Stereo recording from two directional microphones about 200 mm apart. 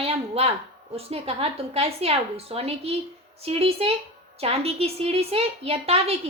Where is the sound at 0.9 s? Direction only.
30° right (ahead or behind).